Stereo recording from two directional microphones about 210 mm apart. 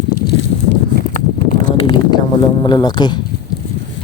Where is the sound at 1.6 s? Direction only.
20° left (ahead or behind).